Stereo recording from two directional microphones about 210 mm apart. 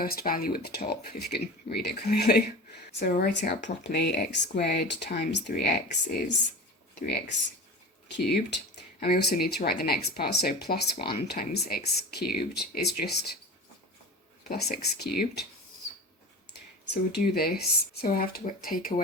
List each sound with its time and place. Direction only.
0.0 s speech: 45° left (ahead or behind)
8.0 s speech: 50° left (ahead or behind)
14.4 s speech: 50° left (ahead or behind)
16.9 s speech: 50° left (ahead or behind)